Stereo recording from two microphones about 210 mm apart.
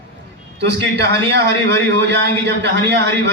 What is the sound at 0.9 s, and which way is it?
Speech, 55° right (ahead or behind).